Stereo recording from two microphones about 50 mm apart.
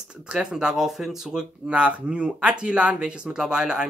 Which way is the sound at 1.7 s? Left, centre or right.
Right.